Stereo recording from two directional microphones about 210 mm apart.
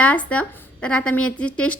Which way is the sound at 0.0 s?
5° left (ahead or behind).